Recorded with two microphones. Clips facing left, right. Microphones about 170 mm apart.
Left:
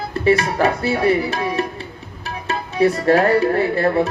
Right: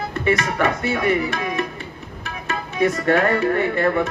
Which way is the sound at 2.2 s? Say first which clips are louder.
Left 3 dB; 30° left (ahead or behind).